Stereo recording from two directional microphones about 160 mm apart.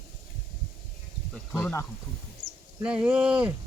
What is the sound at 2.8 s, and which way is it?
Speech, 10° right (ahead or behind).